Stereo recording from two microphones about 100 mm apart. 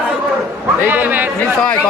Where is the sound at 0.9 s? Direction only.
20° right (ahead or behind).